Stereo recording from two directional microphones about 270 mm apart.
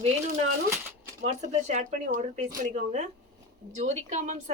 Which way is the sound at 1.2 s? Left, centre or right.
Right.